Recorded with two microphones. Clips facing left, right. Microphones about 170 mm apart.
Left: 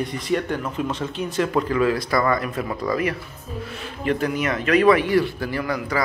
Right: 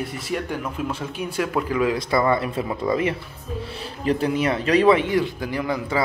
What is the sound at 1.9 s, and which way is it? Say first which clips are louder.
Speech: right 1 dB; 25° right (ahead or behind).